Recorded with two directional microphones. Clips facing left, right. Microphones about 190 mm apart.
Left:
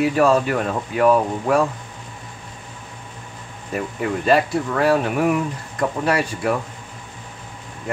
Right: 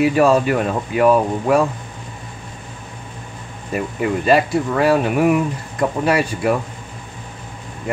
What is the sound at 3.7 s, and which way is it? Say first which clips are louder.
Speech: right 3 dB; 10° right (ahead or behind).